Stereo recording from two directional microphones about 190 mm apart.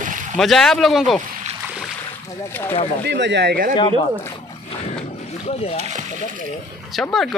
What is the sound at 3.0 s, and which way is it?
Speech, 65° right (ahead or behind).